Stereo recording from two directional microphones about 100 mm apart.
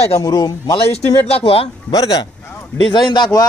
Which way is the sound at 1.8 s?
40° left (ahead or behind).